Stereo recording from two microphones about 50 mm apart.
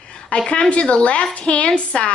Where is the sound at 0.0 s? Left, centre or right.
Left.